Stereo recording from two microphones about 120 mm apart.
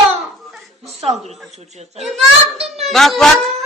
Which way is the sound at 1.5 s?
65° right (ahead or behind).